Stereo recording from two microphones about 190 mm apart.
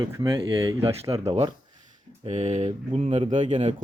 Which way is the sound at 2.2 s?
35° right (ahead or behind).